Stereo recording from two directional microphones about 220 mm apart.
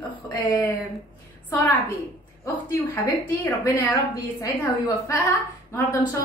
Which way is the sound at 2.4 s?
10° left (ahead or behind).